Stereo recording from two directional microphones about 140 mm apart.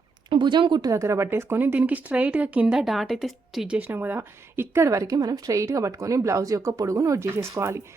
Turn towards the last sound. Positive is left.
turn(degrees=-20)  # may be behind; listen again after turning